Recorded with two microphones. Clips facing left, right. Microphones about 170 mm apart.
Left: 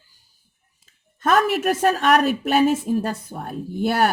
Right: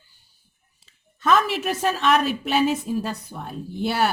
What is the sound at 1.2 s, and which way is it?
A woman's voice, 50° left (ahead or behind).